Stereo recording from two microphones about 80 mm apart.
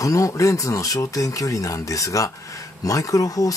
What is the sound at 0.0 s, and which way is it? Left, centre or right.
Speech, left.